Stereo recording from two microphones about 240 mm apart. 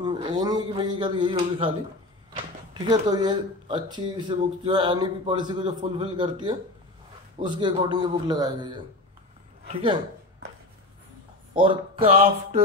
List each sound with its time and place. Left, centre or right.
0.0 s a man's voice: centre
11.6 s speech: right